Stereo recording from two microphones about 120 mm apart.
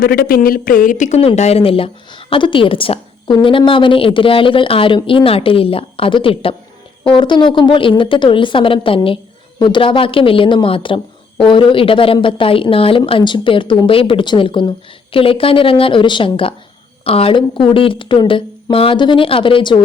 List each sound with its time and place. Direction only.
0.9 s speech: 90° left
1.4 s speech: 60° left (ahead or behind); by 19.8 s 45° left (ahead or behind)